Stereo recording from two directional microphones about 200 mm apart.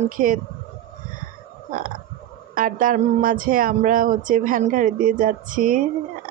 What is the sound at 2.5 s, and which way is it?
Speech, 40° right (ahead or behind).